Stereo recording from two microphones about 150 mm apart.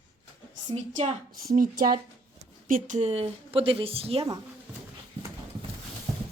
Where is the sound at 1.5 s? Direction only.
75° right (ahead or behind); by 4.3 s 40° right (ahead or behind).